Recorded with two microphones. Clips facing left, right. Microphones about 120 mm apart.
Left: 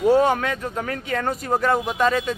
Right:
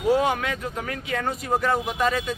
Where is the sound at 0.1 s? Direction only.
35° left (ahead or behind).